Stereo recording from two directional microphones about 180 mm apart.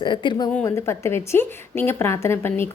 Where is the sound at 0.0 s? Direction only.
25° left (ahead or behind).